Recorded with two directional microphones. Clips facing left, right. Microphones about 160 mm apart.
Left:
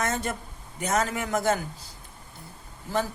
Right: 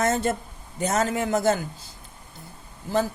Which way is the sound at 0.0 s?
30° right (ahead or behind).